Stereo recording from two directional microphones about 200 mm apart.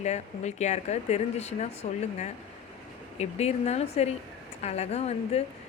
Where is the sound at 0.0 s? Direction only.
35° left (ahead or behind).